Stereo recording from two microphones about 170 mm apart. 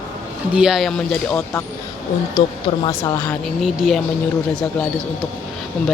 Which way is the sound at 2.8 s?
25° left (ahead or behind).